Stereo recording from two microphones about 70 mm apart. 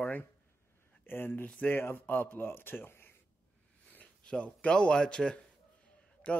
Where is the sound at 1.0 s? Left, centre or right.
Left.